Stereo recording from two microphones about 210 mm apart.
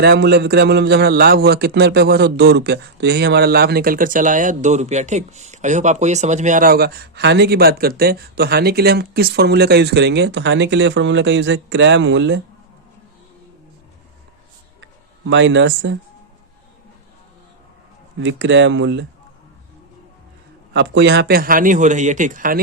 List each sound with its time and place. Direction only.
0.0 s a man's voice: 50° right (ahead or behind)
14.8 s a sound: 60° right (ahead or behind)
18.2 s speech: 60° right (ahead or behind)
20.7 s a man's voice: 55° right (ahead or behind); by 22.6 s 40° right (ahead or behind)